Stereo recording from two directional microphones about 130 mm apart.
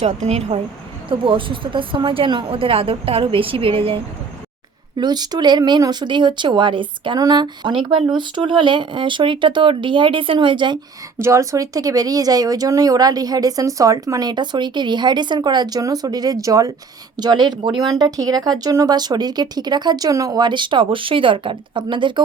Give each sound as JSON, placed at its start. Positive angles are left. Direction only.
{"t": 0.0, "sound": "speech", "side_deg": -55}
{"t": 1.2, "sound": "a woman's voice", "side_deg": -40}
{"t": 4.9, "sound": "speech", "side_deg": -35}
{"t": 11.2, "sound": "speech", "side_deg": -25}